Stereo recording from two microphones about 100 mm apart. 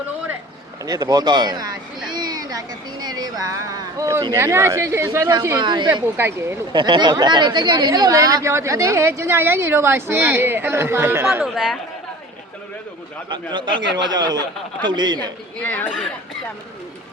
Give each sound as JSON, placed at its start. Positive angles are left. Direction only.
{"t": 0.9, "sound": "a woman's voice", "side_deg": -40}
{"t": 5.5, "sound": "speech", "side_deg": -50}
{"t": 6.1, "sound": "a woman's voice", "side_deg": -25}
{"t": 6.7, "sound": "a woman's voice", "side_deg": -50}
{"t": 11.4, "sound": "speech", "side_deg": 0}
{"t": 13.3, "sound": "speech", "side_deg": -50}
{"t": 15.5, "sound": "speech", "side_deg": 20}